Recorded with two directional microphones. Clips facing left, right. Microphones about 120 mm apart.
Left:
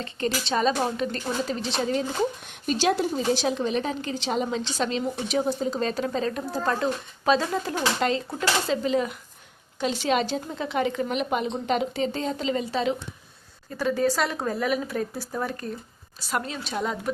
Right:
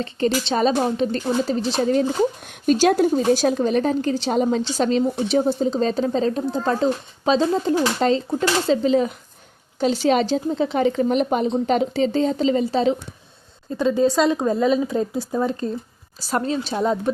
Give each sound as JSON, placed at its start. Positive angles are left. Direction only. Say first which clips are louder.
{"t": 0.0, "sound": "a woman's voice", "louder": "right 7 dB", "side_deg": -30}
{"t": 5.3, "sound": "a woman's voice", "louder": "right 4 dB", "side_deg": -30}
{"t": 13.7, "sound": "speech", "louder": "right 6 dB", "side_deg": -20}
{"t": 16.2, "sound": "a woman's voice", "louder": "right 7 dB", "side_deg": -35}